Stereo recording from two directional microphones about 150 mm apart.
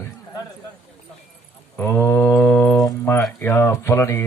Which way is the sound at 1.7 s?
10° left (ahead or behind).